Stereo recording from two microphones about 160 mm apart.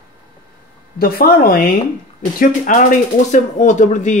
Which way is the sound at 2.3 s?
55° left (ahead or behind).